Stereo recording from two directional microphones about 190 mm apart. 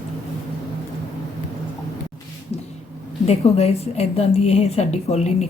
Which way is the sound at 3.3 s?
35° left (ahead or behind).